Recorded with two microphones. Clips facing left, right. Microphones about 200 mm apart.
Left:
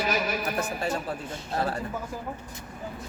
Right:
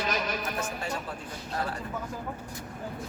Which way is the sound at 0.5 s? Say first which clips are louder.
Left 4 dB; 35° left (ahead or behind).